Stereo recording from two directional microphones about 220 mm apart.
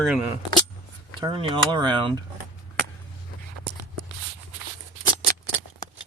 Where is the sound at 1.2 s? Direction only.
20° right (ahead or behind).